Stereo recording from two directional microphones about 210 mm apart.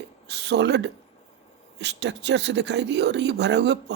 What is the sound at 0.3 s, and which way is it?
Speech, 55° right (ahead or behind).